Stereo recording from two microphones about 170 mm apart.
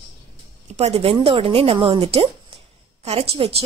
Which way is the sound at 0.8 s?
35° right (ahead or behind).